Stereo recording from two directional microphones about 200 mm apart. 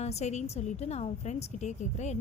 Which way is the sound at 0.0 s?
35° left (ahead or behind).